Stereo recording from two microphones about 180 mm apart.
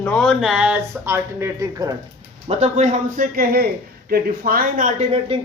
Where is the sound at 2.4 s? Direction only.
40° right (ahead or behind).